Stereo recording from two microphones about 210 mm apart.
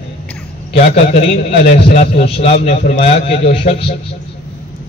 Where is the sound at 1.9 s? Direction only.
30° left (ahead or behind).